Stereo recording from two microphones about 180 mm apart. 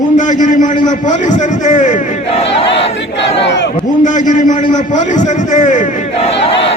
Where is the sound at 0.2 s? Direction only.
45° left (ahead or behind).